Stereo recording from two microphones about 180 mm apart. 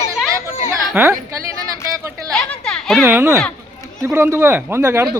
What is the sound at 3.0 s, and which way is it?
Speech, 15° right (ahead or behind).